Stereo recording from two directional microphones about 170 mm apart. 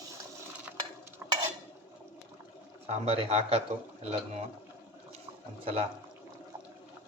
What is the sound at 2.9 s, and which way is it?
Speech, 35° right (ahead or behind).